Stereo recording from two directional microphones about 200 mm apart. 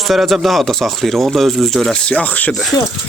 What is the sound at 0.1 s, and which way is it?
Speech, centre (ahead or behind).